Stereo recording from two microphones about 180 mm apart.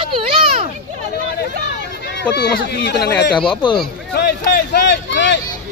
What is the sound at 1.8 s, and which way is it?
Speech, 70° left (ahead or behind).